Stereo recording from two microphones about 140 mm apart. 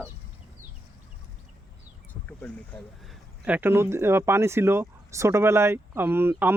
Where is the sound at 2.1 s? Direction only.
10° left (ahead or behind).